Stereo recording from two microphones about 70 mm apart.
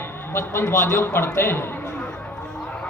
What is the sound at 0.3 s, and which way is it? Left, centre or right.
A man's voice, left.